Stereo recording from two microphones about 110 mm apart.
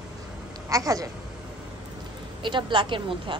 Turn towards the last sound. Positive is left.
turn(degrees=-50)  # may be behind; listen again after turning